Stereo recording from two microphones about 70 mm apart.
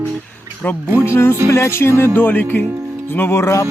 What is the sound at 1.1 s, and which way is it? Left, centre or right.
Speech, left.